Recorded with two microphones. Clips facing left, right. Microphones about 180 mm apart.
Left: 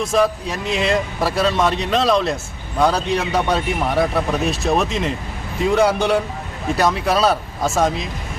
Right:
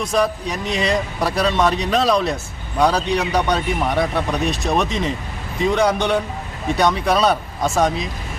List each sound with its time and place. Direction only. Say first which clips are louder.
0.0 s a man's voice: left 2 dB; centre (ahead or behind)